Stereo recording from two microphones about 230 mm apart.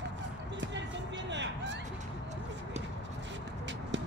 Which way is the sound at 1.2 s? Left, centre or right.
Right.